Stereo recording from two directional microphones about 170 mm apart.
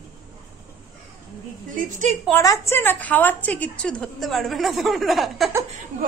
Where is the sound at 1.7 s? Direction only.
50° right (ahead or behind).